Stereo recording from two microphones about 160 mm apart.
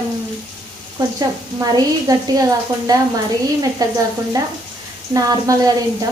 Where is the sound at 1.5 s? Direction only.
25° right (ahead or behind).